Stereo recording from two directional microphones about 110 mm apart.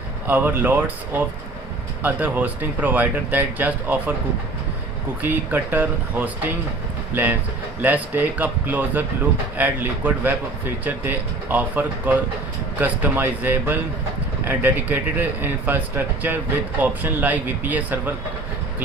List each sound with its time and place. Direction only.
0.3 s speech: 15° right (ahead or behind)
5.2 s speech: 15° right (ahead or behind)